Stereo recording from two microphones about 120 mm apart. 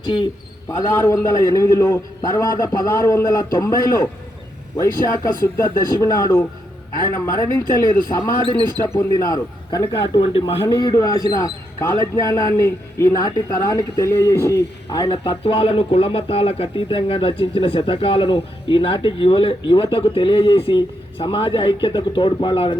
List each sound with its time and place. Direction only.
0.0 s a man's voice: 40° left (ahead or behind)
0.7 s a man's voice: 20° left (ahead or behind)
5.2 s a man's voice: 30° left (ahead or behind)
8.0 s a man's voice: 30° left (ahead or behind)
8.4 s speech: 35° right (ahead or behind)
8.8 s a man's voice: 20° left (ahead or behind)
9.1 s a man's voice: 35° left (ahead or behind)
10.2 s speech: 50° left (ahead or behind)
10.6 s a man's voice: 35° left (ahead or behind)
14.9 s speech: 40° left (ahead or behind)